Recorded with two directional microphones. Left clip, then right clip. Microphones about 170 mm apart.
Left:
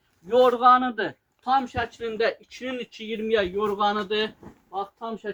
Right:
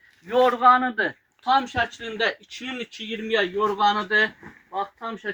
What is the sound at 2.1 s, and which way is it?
Speech, 45° right (ahead or behind).